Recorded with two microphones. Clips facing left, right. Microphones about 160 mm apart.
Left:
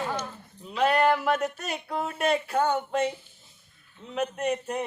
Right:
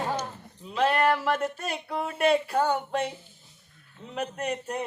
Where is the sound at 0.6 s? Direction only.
Centre (ahead or behind).